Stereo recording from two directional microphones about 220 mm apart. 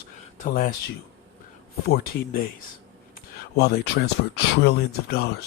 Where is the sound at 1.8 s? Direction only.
45° left (ahead or behind).